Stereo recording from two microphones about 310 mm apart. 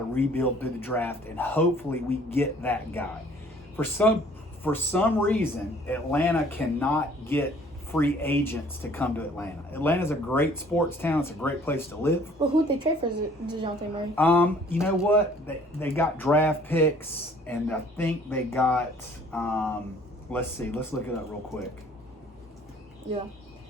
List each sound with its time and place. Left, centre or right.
0.1 s speech: centre
12.4 s speech: centre
14.2 s speech: centre
19.3 s a sound: centre
20.3 s speech: centre